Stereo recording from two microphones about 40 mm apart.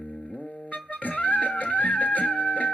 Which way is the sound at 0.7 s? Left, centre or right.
Left.